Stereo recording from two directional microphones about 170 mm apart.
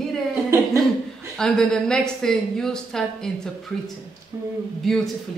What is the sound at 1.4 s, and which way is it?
A woman's voice, 5° left (ahead or behind).